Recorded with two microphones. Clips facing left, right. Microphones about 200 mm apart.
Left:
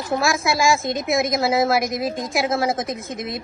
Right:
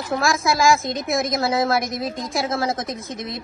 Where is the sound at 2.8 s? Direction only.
50° left (ahead or behind).